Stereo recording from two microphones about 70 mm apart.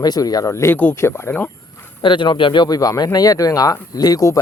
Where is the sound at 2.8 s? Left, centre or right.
Left.